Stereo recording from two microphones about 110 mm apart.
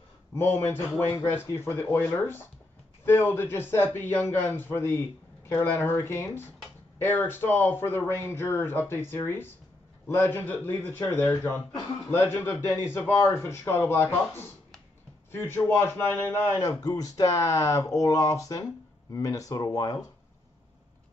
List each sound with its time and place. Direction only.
0.3 s a man's voice: 25° left (ahead or behind)
16.5 s speech: 35° left (ahead or behind)